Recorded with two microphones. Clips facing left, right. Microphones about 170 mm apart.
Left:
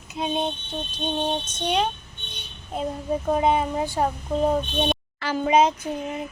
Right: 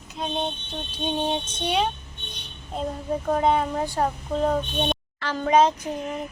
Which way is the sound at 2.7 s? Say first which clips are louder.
Left 1 dB; 10° left (ahead or behind).